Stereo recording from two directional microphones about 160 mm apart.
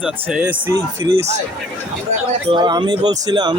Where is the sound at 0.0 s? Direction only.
5° right (ahead or behind).